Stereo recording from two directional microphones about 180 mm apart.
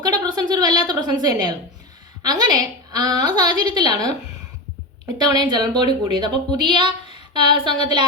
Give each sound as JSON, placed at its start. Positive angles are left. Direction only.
{"t": 0.0, "sound": "a sound", "side_deg": -20}
{"t": 2.2, "sound": "a woman's voice", "side_deg": -20}
{"t": 5.1, "sound": "a woman's voice", "side_deg": -20}